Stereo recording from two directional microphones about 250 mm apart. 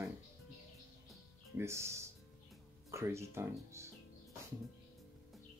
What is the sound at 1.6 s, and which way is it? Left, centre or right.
Speech, centre.